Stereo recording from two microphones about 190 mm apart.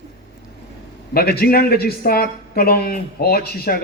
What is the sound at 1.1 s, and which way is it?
A woman's voice, 55° left (ahead or behind).